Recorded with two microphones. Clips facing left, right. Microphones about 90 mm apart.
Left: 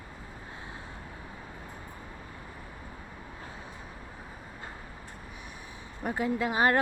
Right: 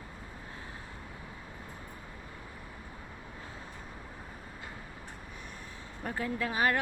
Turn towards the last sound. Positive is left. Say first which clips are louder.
# left 4 dB
turn(degrees=30)  # may be behind; listen again after turning